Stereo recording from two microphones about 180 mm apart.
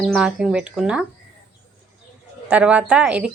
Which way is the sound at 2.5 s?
5° right (ahead or behind).